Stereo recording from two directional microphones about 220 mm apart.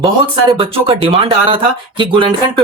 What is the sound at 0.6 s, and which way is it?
Speech, 25° right (ahead or behind).